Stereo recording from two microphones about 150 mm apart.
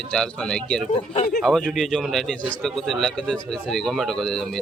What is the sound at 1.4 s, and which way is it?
Speech, centre (ahead or behind).